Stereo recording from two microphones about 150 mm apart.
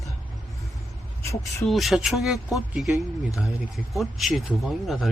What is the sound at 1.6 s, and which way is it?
Speech, centre (ahead or behind).